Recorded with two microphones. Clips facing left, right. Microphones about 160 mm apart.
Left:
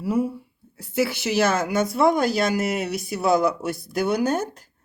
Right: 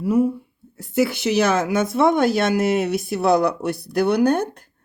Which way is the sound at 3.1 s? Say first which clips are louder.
Right 1 dB; centre (ahead or behind).